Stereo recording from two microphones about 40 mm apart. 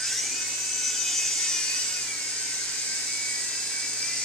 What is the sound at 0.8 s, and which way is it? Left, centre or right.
Wood, centre.